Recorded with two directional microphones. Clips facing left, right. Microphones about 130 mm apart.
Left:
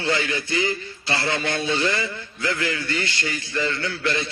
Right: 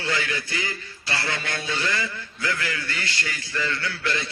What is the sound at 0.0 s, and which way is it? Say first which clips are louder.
A man's voice: left 4 dB; 25° left (ahead or behind).